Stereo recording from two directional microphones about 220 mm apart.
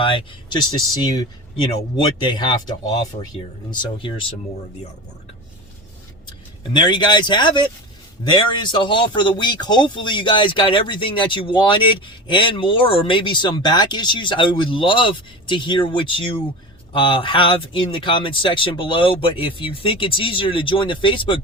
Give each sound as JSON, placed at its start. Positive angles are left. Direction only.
{"t": 0.0, "sound": "speech", "side_deg": 25}
{"t": 6.7, "sound": "speech", "side_deg": 20}